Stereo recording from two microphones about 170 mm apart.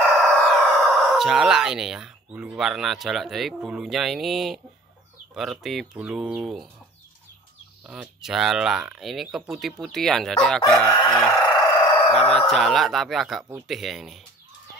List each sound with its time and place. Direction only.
0.3 s speech: centre (ahead or behind)
7.8 s speech: 5° right (ahead or behind)
11.1 s chicken: 5° left (ahead or behind)
11.4 s crowing: 25° left (ahead or behind)
12.2 s speech: centre (ahead or behind)